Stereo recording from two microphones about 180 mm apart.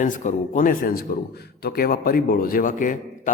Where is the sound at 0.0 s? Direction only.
45° left (ahead or behind).